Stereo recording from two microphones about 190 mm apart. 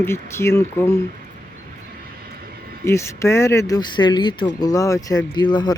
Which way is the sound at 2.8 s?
15° left (ahead or behind).